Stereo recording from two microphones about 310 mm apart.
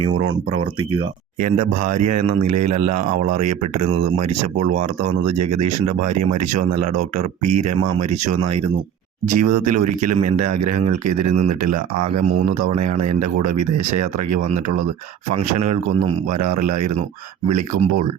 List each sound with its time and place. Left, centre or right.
0.5 s speech: centre
2.0 s speech: right
2.2 s speech: right
2.6 s speech: right
5.2 s speech: right
6.6 s speech: right
7.4 s speech: right
9.2 s speech: right
10.3 s speech: right
16.3 s speech: right